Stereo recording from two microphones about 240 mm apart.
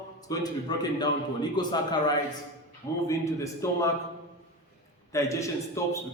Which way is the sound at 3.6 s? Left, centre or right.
Centre.